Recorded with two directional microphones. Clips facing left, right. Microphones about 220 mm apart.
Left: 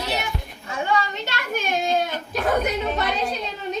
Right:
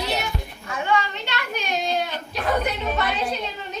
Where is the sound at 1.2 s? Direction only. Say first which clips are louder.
Left 2 dB; 45° left (ahead or behind).